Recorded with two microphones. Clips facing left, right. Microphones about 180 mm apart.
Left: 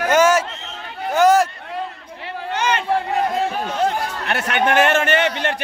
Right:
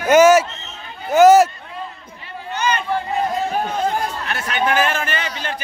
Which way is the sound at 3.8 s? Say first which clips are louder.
Left 1 dB; 70° left (ahead or behind).